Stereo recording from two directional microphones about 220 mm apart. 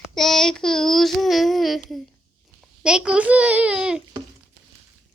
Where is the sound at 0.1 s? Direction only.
Centre (ahead or behind).